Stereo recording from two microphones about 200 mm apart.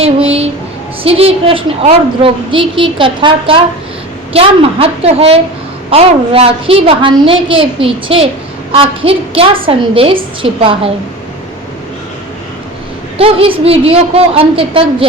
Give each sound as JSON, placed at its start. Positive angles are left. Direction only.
{"t": 0.0, "sound": "a woman's voice", "side_deg": -30}
{"t": 13.1, "sound": "a woman's voice", "side_deg": -30}